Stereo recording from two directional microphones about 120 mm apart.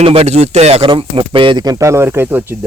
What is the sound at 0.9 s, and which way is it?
Speech, 45° right (ahead or behind).